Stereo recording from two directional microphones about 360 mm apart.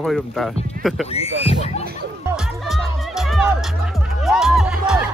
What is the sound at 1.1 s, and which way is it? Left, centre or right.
Speech, centre.